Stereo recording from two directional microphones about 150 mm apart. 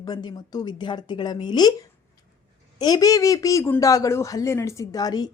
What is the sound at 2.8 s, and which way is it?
Speech, 25° left (ahead or behind).